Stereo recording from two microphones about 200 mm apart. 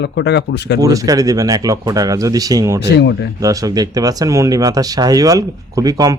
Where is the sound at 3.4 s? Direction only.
15° right (ahead or behind).